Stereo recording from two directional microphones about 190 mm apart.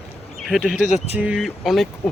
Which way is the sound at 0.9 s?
35° left (ahead or behind).